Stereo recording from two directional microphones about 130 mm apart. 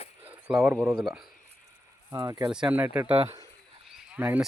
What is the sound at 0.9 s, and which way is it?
Speech, centre (ahead or behind).